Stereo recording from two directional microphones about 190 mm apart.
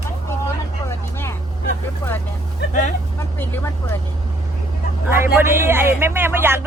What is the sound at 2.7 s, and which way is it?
Speech, 40° left (ahead or behind).